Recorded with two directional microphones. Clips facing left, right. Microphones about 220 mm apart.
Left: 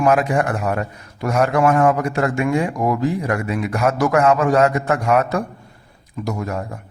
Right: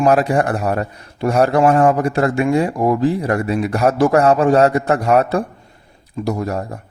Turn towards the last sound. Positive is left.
turn(degrees=-35)  # may be behind; listen again after turning